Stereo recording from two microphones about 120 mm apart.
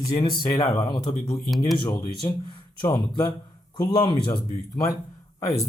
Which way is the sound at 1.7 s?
40° left (ahead or behind).